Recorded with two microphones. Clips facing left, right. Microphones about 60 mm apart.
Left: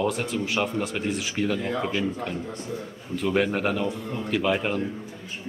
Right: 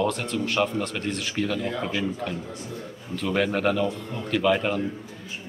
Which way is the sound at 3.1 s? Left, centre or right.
Centre.